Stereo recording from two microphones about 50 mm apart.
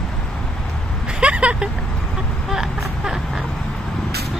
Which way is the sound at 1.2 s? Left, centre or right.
Right.